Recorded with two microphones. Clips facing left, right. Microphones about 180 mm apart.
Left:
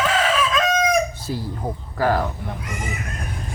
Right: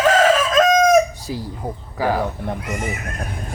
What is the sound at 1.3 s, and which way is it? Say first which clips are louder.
Speech: even; 10° right (ahead or behind).